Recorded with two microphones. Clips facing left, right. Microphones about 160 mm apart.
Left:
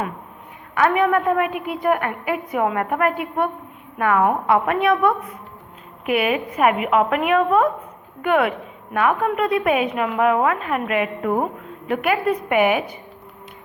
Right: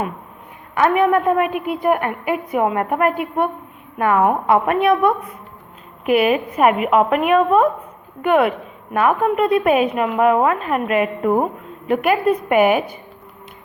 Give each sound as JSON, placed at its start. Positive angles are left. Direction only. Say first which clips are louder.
{"t": 0.7, "sound": "a woman's voice", "louder": "right 2 dB", "side_deg": -25}
{"t": 1.5, "sound": "a woman's voice", "louder": "right 4 dB", "side_deg": 20}
{"t": 1.8, "sound": "a woman's voice", "louder": "right 1 dB", "side_deg": -25}